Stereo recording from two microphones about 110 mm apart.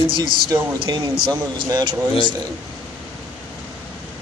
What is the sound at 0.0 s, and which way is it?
Speech, 50° right (ahead or behind).